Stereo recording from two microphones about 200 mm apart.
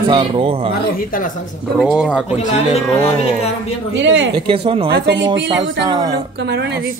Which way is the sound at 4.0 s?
65° right (ahead or behind).